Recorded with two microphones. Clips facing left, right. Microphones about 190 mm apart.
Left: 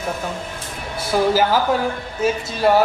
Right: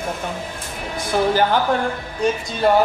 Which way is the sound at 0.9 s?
5° left (ahead or behind).